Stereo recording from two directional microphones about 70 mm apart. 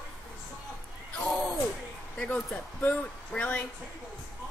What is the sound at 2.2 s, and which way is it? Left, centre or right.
Speech, centre.